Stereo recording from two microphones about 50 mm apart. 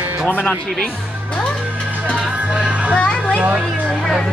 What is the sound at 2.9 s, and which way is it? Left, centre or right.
Children playing, left.